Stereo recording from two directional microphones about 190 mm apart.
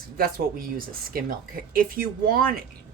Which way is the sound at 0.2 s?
50° right (ahead or behind).